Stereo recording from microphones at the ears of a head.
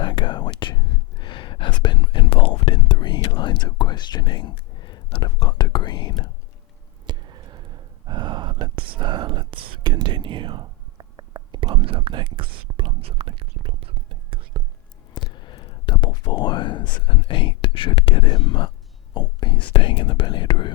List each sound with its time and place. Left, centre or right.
0.0 s whispering: left
7.1 s whispering: right
15.1 s a sound: left
19.1 s speech: left